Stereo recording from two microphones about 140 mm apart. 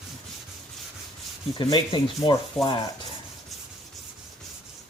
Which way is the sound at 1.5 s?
35° left (ahead or behind).